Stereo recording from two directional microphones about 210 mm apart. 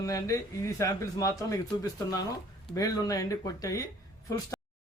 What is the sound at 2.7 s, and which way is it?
A man's voice, 15° left (ahead or behind).